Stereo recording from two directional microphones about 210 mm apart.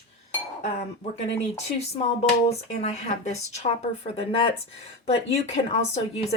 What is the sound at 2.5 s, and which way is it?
Speech, 30° left (ahead or behind).